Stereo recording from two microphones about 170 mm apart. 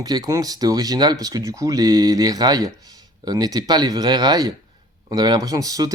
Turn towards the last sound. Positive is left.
turn(degrees=-20)  # may be behind; listen again after turning